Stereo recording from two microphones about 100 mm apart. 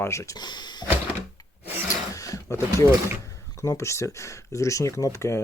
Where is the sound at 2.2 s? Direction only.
30° left (ahead or behind).